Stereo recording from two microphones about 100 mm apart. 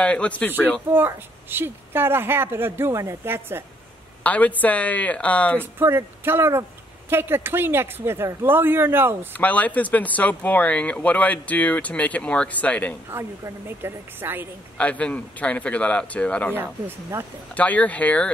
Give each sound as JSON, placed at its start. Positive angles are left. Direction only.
{"t": 0.0, "sound": "speech", "side_deg": 10}
{"t": 0.9, "sound": "a woman's voice", "side_deg": -20}
{"t": 4.2, "sound": "speech", "side_deg": 15}
{"t": 5.6, "sound": "a woman's voice", "side_deg": -25}
{"t": 9.3, "sound": "speech", "side_deg": 15}
{"t": 13.1, "sound": "a woman's voice", "side_deg": -25}
{"t": 14.8, "sound": "speech", "side_deg": 15}
{"t": 17.6, "sound": "speech", "side_deg": 15}